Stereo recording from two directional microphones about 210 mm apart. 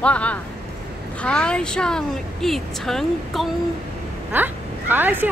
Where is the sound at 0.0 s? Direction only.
5° left (ahead or behind).